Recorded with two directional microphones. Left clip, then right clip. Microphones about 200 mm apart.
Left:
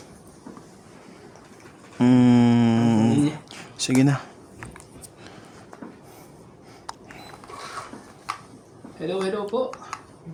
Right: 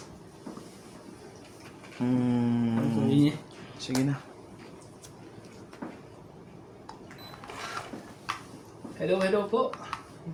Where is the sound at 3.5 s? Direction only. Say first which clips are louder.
Left 9 dB; 60° left (ahead or behind).